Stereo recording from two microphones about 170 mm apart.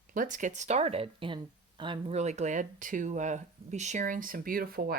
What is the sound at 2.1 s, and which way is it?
Speech, 40° right (ahead or behind).